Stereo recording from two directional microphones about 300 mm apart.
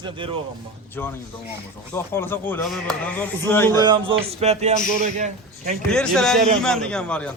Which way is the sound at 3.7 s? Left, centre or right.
Centre.